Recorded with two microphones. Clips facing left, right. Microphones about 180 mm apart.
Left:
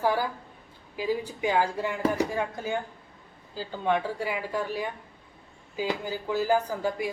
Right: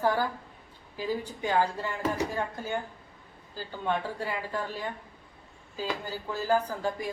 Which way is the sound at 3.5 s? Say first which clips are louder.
Left 4 dB; 10° left (ahead or behind).